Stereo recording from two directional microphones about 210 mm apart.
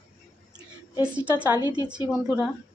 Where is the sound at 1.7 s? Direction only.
20° right (ahead or behind).